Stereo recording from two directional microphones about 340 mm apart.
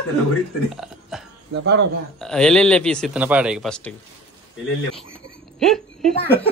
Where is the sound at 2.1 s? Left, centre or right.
Centre.